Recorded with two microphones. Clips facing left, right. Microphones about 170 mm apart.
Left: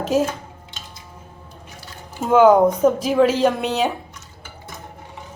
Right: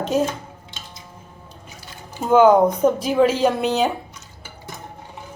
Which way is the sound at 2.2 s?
Centre (ahead or behind).